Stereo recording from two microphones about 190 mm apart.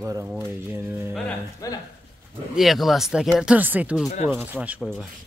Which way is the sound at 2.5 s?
Centre (ahead or behind).